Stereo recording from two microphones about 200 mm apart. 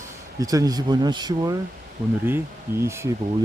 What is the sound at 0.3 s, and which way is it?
Speech, 15° right (ahead or behind).